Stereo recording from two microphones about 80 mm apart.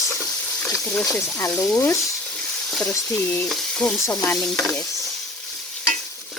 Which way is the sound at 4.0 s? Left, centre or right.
Left.